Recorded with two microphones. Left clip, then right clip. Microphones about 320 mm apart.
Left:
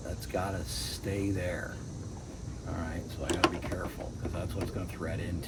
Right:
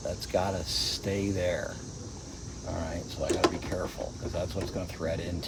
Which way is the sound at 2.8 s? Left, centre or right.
Right.